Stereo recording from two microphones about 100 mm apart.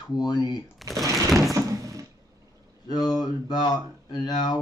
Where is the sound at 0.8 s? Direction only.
Centre (ahead or behind).